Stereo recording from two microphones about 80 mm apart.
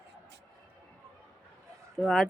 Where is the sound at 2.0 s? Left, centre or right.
Centre.